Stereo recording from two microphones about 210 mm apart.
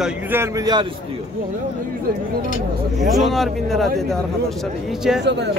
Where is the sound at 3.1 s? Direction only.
Centre (ahead or behind).